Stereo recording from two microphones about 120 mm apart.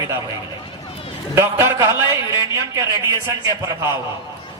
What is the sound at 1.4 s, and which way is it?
A man's voice, 20° right (ahead or behind).